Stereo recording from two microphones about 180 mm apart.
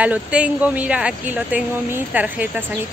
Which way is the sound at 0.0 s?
5° right (ahead or behind).